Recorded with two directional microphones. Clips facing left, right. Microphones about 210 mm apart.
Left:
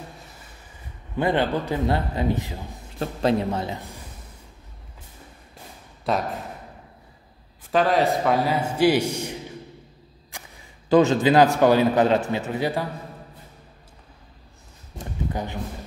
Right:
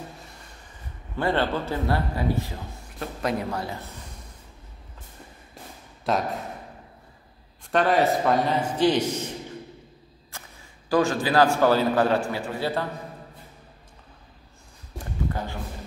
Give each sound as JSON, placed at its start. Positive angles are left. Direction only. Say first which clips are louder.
{"t": 1.1, "sound": "a man's voice", "louder": "left 2 dB", "side_deg": 15}
{"t": 3.0, "sound": "a man's voice", "louder": "left 5 dB", "side_deg": 30}
{"t": 6.0, "sound": "speech", "louder": "even", "side_deg": 0}
{"t": 7.7, "sound": "a man's voice", "louder": "left 1 dB", "side_deg": 0}
{"t": 10.3, "sound": "a sound", "louder": "left 2 dB", "side_deg": 15}
{"t": 10.9, "sound": "a man's voice", "louder": "left 5 dB", "side_deg": 20}
{"t": 15.3, "sound": "a man's voice", "louder": "left 3 dB", "side_deg": 20}